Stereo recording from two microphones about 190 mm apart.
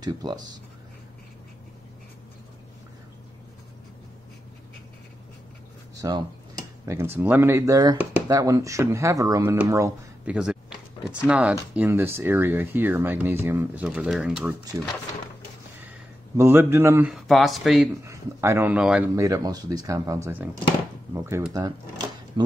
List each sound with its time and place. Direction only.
0.0 s speech: 20° right (ahead or behind)
5.9 s speech: 20° right (ahead or behind)
16.3 s speech: 10° right (ahead or behind)
17.3 s speech: centre (ahead or behind)
18.0 s speech: 15° right (ahead or behind)
19.1 s speech: 15° right (ahead or behind)